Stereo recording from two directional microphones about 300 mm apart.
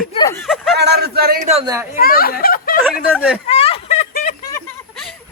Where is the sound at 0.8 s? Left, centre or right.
Right; by 1.8 s centre.